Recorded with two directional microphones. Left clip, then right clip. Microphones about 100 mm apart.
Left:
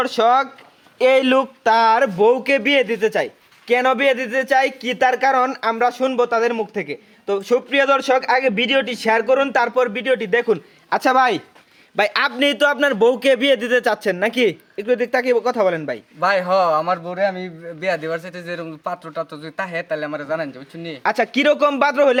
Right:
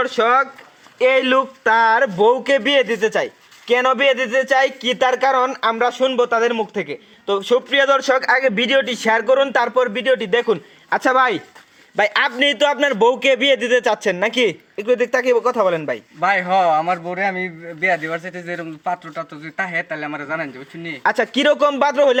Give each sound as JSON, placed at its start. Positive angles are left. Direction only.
{"t": 0.0, "sound": "a man's voice", "side_deg": 50}
{"t": 0.9, "sound": "speech", "side_deg": 65}
{"t": 2.0, "sound": "speech", "side_deg": 20}
{"t": 7.9, "sound": "a man's voice", "side_deg": 0}
{"t": 11.0, "sound": "a man's voice", "side_deg": 45}
{"t": 11.9, "sound": "speech", "side_deg": 20}
{"t": 16.2, "sound": "a man's voice", "side_deg": 45}
{"t": 19.6, "sound": "speech", "side_deg": 35}
{"t": 21.0, "sound": "speech", "side_deg": 20}